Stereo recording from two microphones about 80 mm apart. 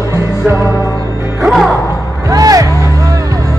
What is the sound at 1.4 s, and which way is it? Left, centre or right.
Music, centre.